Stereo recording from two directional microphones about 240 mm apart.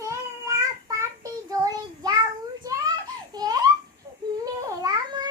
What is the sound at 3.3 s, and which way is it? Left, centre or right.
Baby laughter, centre.